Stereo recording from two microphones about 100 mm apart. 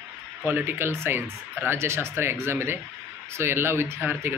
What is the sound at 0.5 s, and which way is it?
Speech, 20° right (ahead or behind).